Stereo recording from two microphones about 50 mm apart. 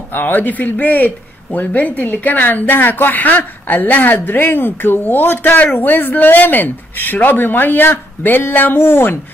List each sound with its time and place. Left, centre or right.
0.1 s speech: left